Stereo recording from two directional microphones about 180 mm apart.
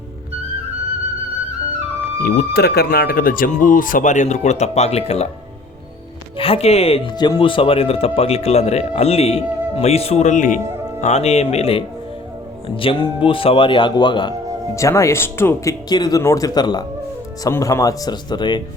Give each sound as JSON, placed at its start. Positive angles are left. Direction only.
{"t": 2.2, "sound": "speech", "side_deg": 60}
{"t": 6.3, "sound": "speech", "side_deg": 30}
{"t": 10.7, "sound": "music", "side_deg": -15}
{"t": 11.0, "sound": "a man's voice", "side_deg": 35}